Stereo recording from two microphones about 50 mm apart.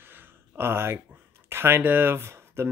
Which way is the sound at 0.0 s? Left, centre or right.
Right.